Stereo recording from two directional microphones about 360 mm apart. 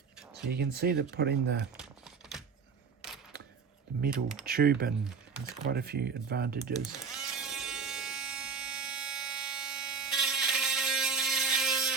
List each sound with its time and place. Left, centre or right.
0.5 s speech: right
1.7 s typing: centre
4.1 s speech: centre
4.4 s speech: right
7.0 s sheep: centre